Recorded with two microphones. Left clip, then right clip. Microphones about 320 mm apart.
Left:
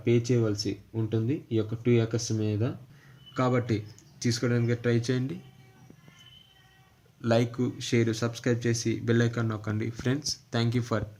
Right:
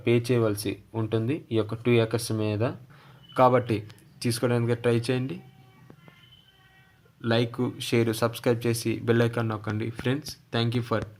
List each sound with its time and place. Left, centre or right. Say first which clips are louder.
0.0 s speech: right 3 dB; centre
7.2 s speech: even; centre